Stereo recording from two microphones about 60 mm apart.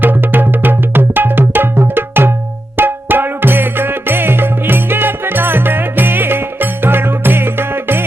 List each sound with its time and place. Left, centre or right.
0.0 s music: right